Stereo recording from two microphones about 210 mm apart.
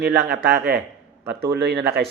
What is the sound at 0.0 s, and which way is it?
Speech, 55° right (ahead or behind).